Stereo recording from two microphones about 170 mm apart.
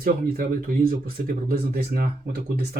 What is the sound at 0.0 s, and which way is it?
Speech, 60° right (ahead or behind).